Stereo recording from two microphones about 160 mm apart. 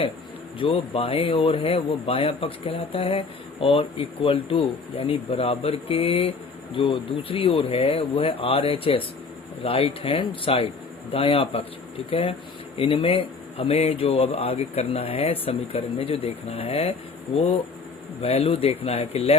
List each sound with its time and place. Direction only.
0.6 s speech: 35° left (ahead or behind)